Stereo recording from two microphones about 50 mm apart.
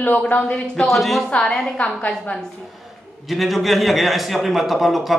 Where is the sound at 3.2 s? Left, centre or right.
Centre.